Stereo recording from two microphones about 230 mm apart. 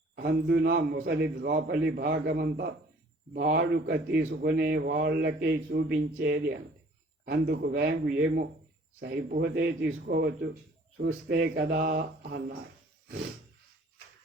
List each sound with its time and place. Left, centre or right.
0.2 s speech: right